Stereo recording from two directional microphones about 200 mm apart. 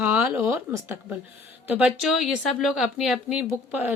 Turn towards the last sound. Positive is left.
turn(degrees=-10)  # may be behind; listen again after turning